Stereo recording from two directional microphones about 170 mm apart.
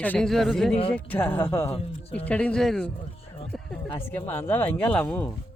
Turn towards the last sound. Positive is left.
turn(degrees=5)  # may be behind; listen again after turning